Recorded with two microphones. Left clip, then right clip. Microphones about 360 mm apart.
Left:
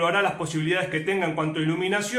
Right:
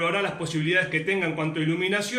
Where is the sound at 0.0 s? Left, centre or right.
Left.